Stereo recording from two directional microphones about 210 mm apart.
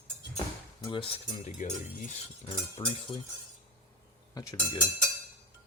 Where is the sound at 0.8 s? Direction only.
25° left (ahead or behind).